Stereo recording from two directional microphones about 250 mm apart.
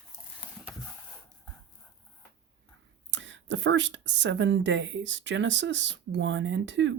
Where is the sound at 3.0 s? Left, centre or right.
Right.